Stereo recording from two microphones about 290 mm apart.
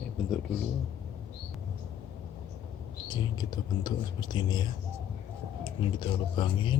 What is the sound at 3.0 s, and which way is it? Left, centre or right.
Speech, centre.